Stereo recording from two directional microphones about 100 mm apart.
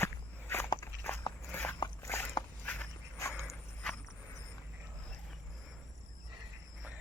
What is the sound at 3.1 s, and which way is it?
Walk, 30° left (ahead or behind).